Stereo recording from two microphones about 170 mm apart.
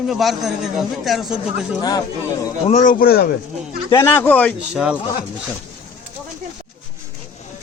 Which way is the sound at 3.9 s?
15° left (ahead or behind).